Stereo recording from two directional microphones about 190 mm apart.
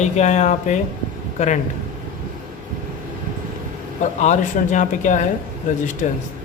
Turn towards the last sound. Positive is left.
turn(degrees=40)  # may be behind; listen again after turning